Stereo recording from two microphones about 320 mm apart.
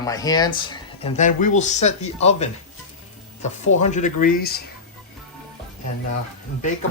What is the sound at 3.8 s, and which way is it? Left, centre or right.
Speech, left.